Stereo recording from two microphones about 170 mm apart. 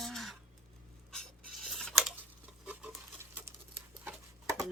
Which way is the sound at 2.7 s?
10° right (ahead or behind).